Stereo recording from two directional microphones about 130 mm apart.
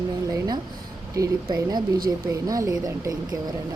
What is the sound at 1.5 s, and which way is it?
Speech, 30° right (ahead or behind).